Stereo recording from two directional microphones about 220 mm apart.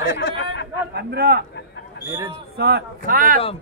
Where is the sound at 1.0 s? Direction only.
45° right (ahead or behind).